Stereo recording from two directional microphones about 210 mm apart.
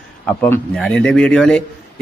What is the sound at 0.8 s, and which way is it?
Speech, 5° left (ahead or behind).